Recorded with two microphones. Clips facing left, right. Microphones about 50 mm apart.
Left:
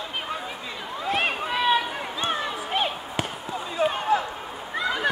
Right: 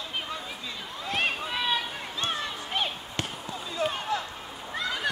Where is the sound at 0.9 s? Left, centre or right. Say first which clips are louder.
Left 4 dB; centre.